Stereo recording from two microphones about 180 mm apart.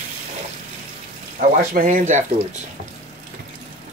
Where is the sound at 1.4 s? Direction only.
50° right (ahead or behind).